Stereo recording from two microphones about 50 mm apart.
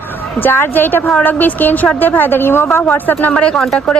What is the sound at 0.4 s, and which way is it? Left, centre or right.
A woman's voice, left.